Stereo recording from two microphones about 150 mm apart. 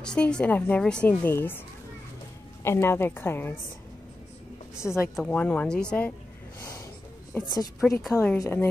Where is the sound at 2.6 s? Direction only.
15° left (ahead or behind).